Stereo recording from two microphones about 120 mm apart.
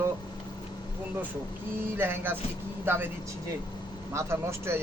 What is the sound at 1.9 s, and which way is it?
Speech, 15° right (ahead or behind).